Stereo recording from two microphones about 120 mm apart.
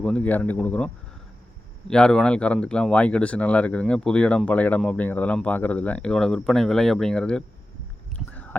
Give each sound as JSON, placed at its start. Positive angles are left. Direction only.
{"t": 0.0, "sound": "speech", "side_deg": 10}
{"t": 1.9, "sound": "speech", "side_deg": 5}
{"t": 8.3, "sound": "a sound", "side_deg": 15}